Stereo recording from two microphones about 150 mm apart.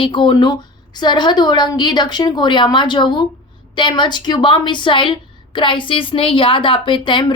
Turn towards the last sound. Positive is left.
turn(degrees=30)  # may be behind; listen again after turning